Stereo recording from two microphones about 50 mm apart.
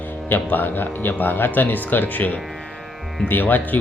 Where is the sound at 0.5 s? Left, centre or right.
Left.